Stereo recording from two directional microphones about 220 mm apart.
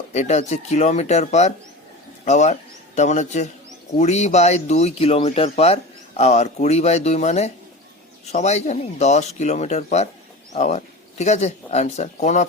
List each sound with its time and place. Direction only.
0.1 s speech: 30° left (ahead or behind)